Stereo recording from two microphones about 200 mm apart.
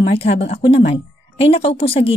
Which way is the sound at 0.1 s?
30° left (ahead or behind).